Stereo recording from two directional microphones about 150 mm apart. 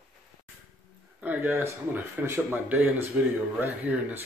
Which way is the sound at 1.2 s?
10° right (ahead or behind).